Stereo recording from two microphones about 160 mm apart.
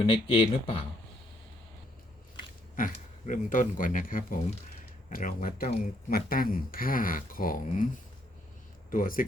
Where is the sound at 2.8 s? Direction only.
55° left (ahead or behind).